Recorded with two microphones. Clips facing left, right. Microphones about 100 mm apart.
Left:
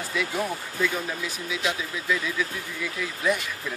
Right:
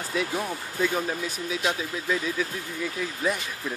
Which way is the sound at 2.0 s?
40° right (ahead or behind).